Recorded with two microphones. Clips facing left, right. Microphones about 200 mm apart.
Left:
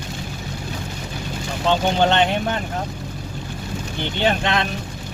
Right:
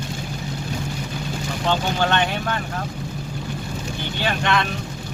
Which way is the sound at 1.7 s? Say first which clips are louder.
Left 4 dB; 20° left (ahead or behind).